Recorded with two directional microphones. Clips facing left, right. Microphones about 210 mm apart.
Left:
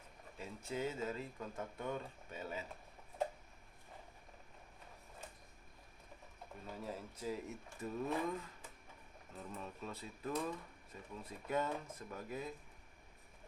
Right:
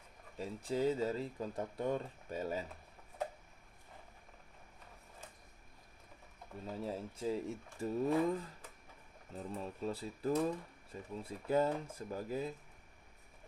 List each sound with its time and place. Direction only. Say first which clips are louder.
0.3 s speech: right 6 dB; 35° right (ahead or behind)
6.7 s speech: right 5 dB; 30° right (ahead or behind)